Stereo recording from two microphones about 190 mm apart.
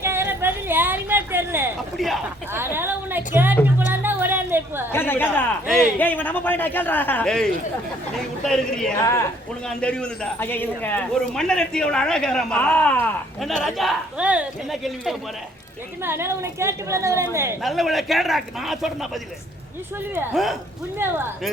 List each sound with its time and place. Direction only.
0.0 s a sound: 15° right (ahead or behind)
2.0 s a man's voice: centre (ahead or behind)
2.5 s a woman's voice: 10° right (ahead or behind)
4.0 s chatter: 10° right (ahead or behind)
4.9 s a man's voice: 10° left (ahead or behind)
9.0 s a man's voice: 15° left (ahead or behind)
9.6 s a man's voice: 5° left (ahead or behind)
16.0 s a woman's voice: 10° right (ahead or behind)
17.6 s a man's voice: centre (ahead or behind)
20.3 s a man's voice: centre (ahead or behind)
21.0 s a woman's voice: 10° right (ahead or behind)